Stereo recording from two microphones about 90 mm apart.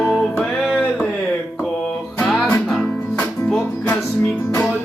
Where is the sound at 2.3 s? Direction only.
25° left (ahead or behind).